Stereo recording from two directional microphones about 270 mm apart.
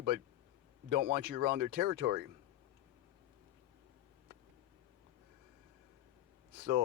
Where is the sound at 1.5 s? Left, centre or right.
Right.